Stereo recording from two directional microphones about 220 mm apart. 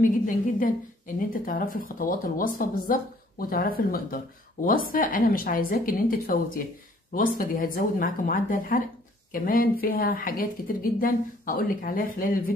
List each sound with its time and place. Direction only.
0.6 s speech: 40° left (ahead or behind)